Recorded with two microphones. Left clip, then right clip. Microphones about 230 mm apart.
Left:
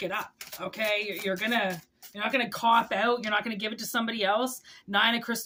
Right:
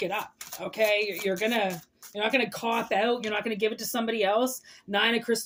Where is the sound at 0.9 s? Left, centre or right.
Centre.